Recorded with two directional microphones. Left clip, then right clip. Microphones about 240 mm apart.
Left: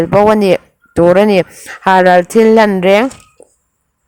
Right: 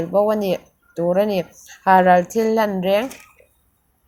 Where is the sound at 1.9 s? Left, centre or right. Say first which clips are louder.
Left 5 dB; left.